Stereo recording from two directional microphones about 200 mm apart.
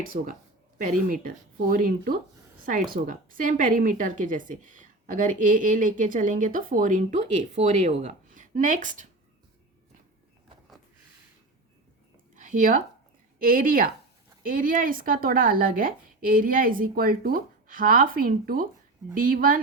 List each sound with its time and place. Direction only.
0.0 s a woman's voice: 45° right (ahead or behind)
12.4 s speech: 40° right (ahead or behind)